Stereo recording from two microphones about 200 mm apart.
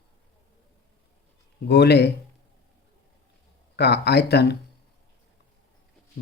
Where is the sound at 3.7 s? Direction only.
55° left (ahead or behind).